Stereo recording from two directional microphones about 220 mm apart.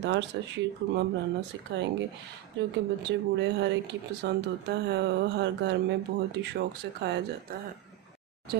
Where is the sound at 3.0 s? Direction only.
50° right (ahead or behind).